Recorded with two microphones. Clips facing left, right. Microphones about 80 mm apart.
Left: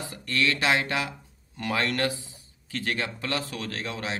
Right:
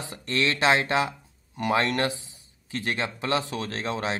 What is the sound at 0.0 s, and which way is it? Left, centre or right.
A man's voice, right.